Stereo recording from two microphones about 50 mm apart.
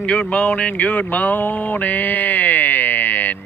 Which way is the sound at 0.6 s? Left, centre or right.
Left.